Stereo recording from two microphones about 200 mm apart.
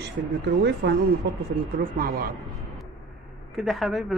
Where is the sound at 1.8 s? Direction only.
45° right (ahead or behind).